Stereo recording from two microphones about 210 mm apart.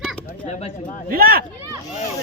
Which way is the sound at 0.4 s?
30° left (ahead or behind).